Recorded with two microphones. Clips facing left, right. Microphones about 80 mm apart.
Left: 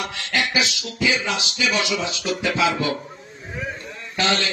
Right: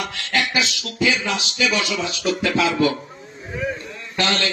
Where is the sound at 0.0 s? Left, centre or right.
Centre.